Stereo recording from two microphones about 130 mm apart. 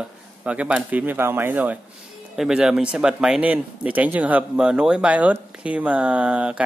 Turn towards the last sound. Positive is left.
turn(degrees=-10)  # may be behind; listen again after turning